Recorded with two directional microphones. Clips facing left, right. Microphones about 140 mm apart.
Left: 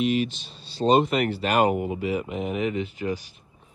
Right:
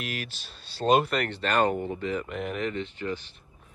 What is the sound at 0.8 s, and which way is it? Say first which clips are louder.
Speech: left 3 dB; 15° left (ahead or behind).